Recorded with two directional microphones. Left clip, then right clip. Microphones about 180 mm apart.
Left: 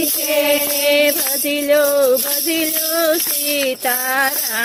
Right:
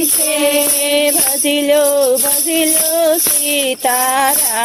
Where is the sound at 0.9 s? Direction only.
25° right (ahead or behind).